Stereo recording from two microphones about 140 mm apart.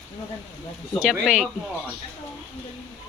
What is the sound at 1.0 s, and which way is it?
Speech, 5° right (ahead or behind).